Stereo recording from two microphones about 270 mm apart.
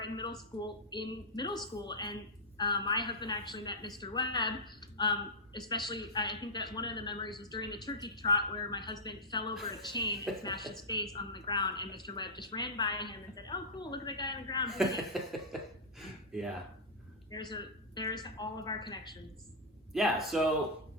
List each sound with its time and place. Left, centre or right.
0.0 s a sound: centre
0.6 s speech: centre
14.7 s speech: centre
15.5 s a sound: centre
16.0 s gasp: centre
17.3 s speech: centre
19.9 s speech: centre